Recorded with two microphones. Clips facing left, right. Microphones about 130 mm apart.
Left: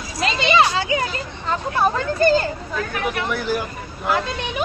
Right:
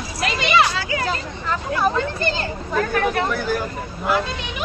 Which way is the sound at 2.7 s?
35° right (ahead or behind).